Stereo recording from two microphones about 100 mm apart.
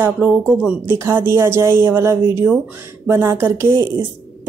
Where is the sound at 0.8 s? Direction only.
25° right (ahead or behind).